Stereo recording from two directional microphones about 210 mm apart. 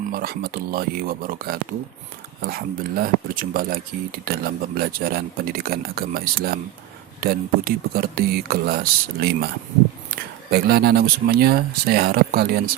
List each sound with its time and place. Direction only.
0.0 s speech: 45° right (ahead or behind)